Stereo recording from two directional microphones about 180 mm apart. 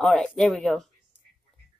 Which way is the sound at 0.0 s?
Centre (ahead or behind).